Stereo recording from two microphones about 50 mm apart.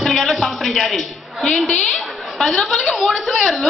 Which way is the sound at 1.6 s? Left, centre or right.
Left.